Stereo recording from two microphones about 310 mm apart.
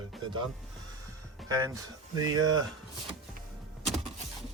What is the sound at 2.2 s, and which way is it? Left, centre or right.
Speech, centre.